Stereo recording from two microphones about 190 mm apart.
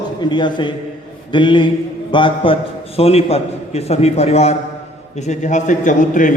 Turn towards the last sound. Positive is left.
turn(degrees=45)  # may be behind; listen again after turning